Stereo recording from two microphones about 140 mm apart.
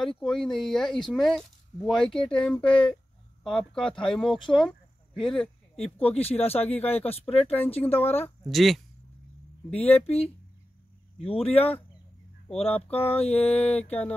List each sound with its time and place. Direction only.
0.2 s speech: centre (ahead or behind)
5.9 s speech: 45° left (ahead or behind)
8.0 s speech: 15° left (ahead or behind)
8.5 s speech: centre (ahead or behind)
9.8 s speech: 45° left (ahead or behind)